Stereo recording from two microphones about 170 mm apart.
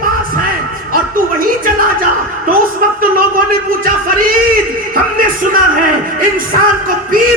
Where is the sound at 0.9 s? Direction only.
55° right (ahead or behind).